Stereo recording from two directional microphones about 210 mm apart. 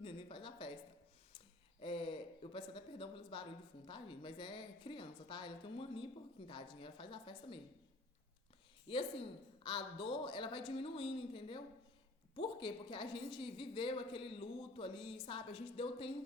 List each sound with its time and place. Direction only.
0.0 s a sound: 25° left (ahead or behind)
1.8 s a woman's voice: 25° left (ahead or behind)
8.9 s a woman's voice: 25° left (ahead or behind)